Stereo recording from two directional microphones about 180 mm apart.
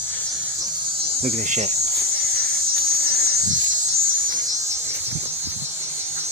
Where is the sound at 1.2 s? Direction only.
35° right (ahead or behind).